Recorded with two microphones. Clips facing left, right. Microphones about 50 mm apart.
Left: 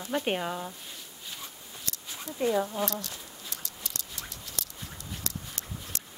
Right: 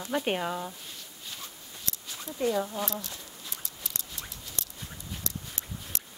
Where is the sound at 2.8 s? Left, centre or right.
Centre.